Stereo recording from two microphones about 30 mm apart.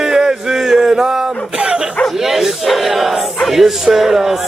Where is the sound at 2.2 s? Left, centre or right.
Centre.